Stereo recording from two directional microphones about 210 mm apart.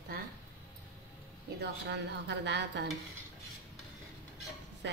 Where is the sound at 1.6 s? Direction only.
55° right (ahead or behind).